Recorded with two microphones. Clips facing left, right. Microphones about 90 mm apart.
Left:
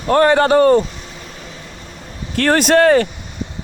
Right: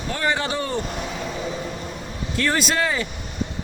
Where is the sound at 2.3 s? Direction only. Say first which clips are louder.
Left 10 dB; 60° left (ahead or behind).